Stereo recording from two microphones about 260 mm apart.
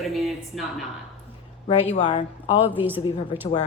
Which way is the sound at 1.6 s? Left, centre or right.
Left.